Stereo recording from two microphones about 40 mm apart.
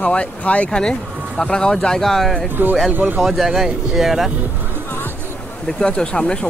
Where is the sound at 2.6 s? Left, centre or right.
Right.